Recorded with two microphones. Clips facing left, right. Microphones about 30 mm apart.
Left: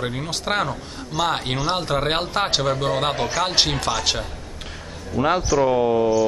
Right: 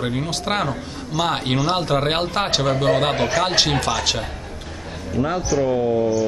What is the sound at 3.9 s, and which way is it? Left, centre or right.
Speech, centre.